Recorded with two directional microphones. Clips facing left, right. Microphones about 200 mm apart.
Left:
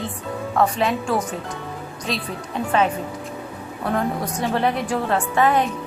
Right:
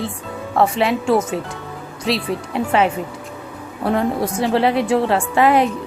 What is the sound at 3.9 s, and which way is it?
Speech, 25° right (ahead or behind).